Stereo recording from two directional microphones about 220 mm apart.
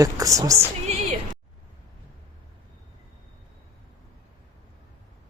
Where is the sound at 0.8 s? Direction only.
30° right (ahead or behind).